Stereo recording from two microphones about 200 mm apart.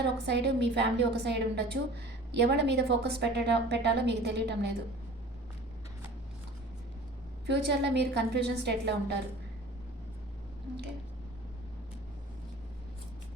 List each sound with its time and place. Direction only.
0.0 s a woman's voice: 60° right (ahead or behind)
7.4 s a woman's voice: 55° right (ahead or behind)